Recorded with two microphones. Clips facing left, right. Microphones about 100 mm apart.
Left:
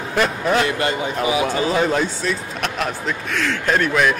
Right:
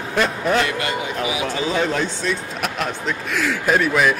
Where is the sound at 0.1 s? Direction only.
Centre (ahead or behind).